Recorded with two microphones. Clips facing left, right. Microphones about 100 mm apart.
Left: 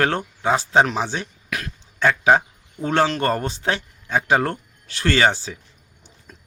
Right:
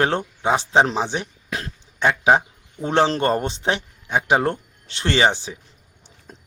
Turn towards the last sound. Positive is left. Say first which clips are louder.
# right 3 dB
turn(degrees=-35)  # may be behind; listen again after turning